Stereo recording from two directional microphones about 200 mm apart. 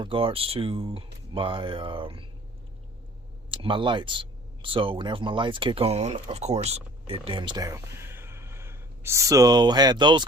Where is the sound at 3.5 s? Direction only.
25° right (ahead or behind).